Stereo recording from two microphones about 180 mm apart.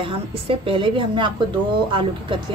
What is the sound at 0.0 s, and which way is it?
A woman's voice, 30° right (ahead or behind).